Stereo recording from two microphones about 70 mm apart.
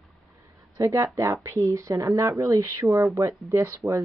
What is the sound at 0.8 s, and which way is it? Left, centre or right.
Speech, right.